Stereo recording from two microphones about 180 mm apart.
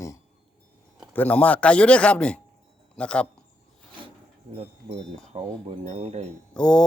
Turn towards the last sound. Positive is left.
turn(degrees=5)  # may be behind; listen again after turning